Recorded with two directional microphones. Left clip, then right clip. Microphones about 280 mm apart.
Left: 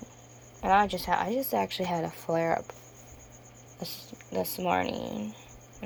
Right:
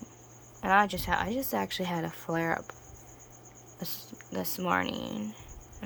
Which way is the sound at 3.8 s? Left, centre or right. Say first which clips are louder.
Left 2 dB; centre.